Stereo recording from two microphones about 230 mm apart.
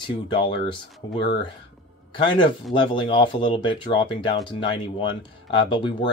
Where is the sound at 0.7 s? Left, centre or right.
Left.